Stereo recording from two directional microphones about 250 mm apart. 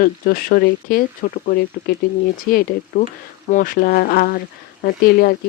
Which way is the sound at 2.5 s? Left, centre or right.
Left.